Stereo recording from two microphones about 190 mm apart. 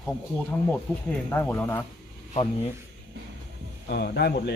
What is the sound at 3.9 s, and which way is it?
Speech, 60° left (ahead or behind).